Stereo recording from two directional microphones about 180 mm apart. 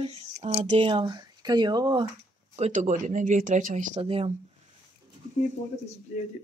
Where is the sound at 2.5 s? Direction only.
40° right (ahead or behind).